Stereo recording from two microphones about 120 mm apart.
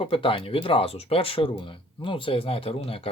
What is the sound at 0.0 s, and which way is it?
Speech, 45° left (ahead or behind).